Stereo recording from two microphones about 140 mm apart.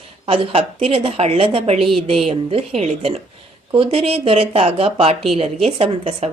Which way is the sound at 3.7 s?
40° right (ahead or behind).